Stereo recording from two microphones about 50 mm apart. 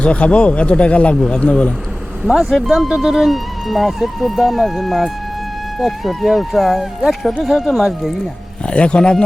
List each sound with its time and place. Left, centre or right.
0.0 s speech: left
1.1 s speech: centre
1.4 s speech: centre
2.3 s speech: centre
8.6 s speech: left